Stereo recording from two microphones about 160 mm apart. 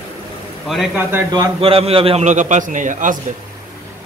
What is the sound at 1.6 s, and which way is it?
A man's voice, 35° right (ahead or behind).